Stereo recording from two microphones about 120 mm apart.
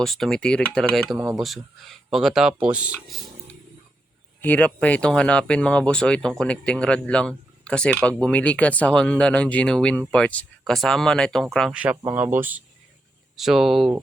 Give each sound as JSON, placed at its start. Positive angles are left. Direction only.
{"t": 0.0, "sound": "speech", "side_deg": 0}
{"t": 1.1, "sound": "speech", "side_deg": -25}
{"t": 1.4, "sound": "speech", "side_deg": 0}
{"t": 4.4, "sound": "speech", "side_deg": 10}
{"t": 11.7, "sound": "speech", "side_deg": -10}
{"t": 13.3, "sound": "speech", "side_deg": -5}